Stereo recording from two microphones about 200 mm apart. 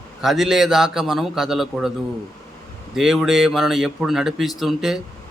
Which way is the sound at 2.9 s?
Centre (ahead or behind).